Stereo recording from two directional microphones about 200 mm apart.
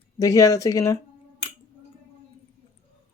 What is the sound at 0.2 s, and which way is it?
Speech, 15° left (ahead or behind).